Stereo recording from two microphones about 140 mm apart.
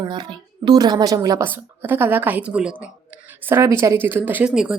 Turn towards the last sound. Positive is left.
turn(degrees=-5)  # may be behind; listen again after turning